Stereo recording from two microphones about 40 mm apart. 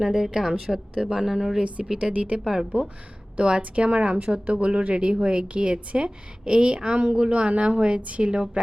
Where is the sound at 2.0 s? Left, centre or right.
Right.